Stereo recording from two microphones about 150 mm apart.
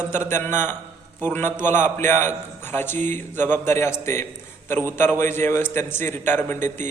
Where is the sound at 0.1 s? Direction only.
15° left (ahead or behind).